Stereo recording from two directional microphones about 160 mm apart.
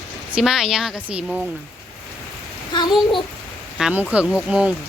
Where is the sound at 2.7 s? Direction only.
30° left (ahead or behind).